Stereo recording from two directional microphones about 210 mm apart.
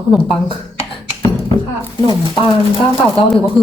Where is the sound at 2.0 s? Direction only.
20° left (ahead or behind).